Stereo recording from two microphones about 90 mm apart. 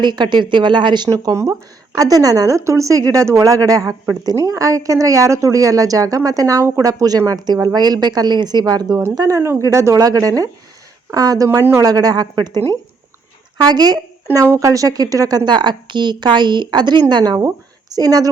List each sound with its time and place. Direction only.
0.0 s a woman's voice: 55° right (ahead or behind)
1.1 s a woman's voice: 40° right (ahead or behind)
11.4 s speech: 30° right (ahead or behind)
11.8 s a woman's voice: 45° right (ahead or behind)
13.7 s a woman's voice: 50° right (ahead or behind)
14.4 s a woman's voice: 35° right (ahead or behind)